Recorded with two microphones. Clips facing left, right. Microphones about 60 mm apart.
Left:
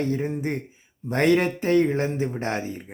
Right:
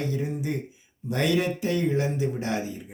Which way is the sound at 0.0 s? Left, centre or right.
Left.